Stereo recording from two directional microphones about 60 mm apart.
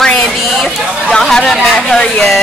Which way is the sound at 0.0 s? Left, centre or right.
Centre.